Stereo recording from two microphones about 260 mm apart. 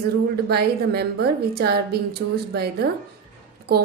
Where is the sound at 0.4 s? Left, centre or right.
Right.